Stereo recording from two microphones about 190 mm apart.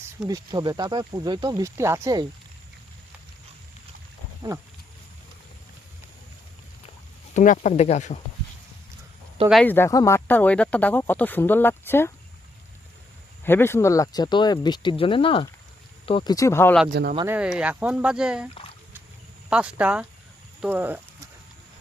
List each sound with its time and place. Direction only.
0.3 s speech: 20° right (ahead or behind)
7.3 s speech: 40° left (ahead or behind)
9.5 s speech: 5° left (ahead or behind)
13.4 s speech: 10° left (ahead or behind)
17.2 s speech: 5° right (ahead or behind)
19.5 s speech: 5° right (ahead or behind)